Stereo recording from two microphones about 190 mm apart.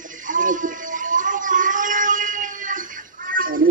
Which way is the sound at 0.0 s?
45° right (ahead or behind).